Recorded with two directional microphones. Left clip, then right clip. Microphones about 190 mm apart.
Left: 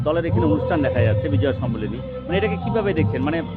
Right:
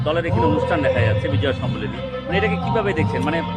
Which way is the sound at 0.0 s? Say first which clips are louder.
Right 1 dB; 40° left (ahead or behind).